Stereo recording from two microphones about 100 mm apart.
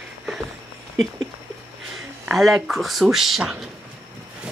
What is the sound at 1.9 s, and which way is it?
Speech, centre (ahead or behind).